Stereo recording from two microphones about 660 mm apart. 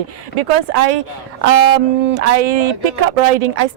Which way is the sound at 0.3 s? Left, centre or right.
Right.